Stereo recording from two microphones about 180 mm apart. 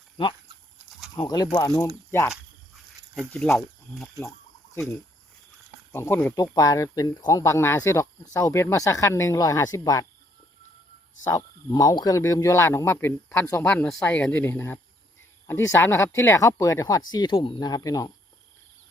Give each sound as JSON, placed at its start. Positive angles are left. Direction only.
{"t": 1.1, "sound": "speech", "side_deg": 20}
{"t": 5.9, "sound": "speech", "side_deg": 15}
{"t": 6.3, "sound": "speech", "side_deg": 20}
{"t": 11.3, "sound": "speech", "side_deg": 20}